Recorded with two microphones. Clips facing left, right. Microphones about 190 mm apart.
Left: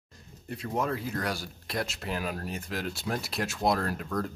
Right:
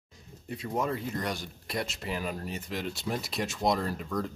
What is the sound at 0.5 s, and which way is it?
Speech, centre (ahead or behind).